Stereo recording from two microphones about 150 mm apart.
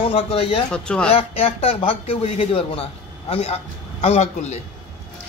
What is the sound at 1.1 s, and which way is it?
A man's voice, 40° left (ahead or behind).